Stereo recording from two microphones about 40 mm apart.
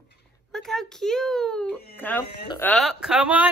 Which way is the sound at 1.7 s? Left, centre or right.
Left.